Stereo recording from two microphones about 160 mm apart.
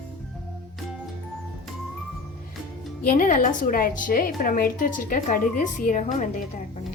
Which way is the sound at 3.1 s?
55° left (ahead or behind).